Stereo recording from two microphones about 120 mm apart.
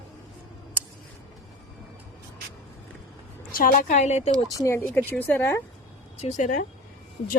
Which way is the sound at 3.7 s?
80° left.